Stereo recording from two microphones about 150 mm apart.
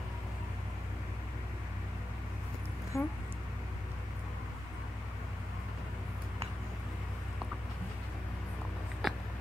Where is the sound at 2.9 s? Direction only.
20° left (ahead or behind).